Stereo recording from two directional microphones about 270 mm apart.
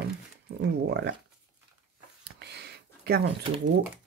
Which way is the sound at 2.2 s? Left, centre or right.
Right.